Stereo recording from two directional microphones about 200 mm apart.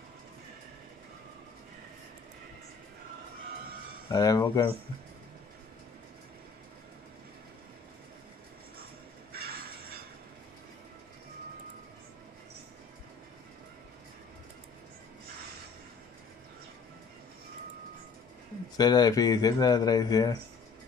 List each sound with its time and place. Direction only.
4.1 s speech: 20° left (ahead or behind)
18.8 s speech: 20° left (ahead or behind)